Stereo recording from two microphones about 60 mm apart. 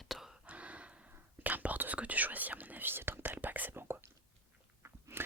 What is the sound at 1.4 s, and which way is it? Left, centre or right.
Whispering, right.